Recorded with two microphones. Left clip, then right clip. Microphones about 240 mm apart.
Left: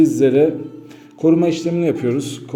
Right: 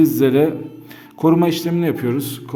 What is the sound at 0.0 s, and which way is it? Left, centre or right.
A man's voice, right.